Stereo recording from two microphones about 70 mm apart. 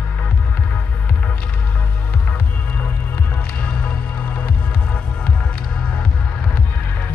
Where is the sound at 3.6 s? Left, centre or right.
Centre.